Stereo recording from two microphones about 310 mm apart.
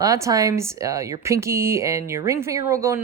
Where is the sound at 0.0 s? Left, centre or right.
Centre.